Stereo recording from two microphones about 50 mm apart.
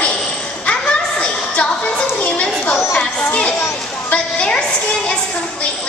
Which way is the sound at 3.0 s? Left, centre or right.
Left.